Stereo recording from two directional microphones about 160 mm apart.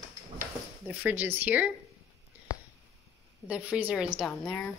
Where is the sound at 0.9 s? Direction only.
10° right (ahead or behind).